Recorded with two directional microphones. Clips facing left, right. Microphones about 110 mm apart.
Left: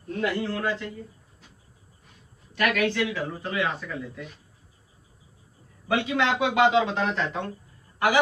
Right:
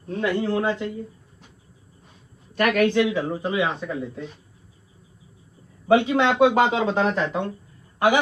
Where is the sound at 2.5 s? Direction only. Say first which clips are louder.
Right 5 dB; 45° right (ahead or behind).